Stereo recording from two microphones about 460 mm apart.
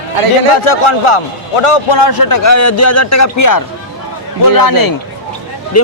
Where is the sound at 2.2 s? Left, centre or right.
Left.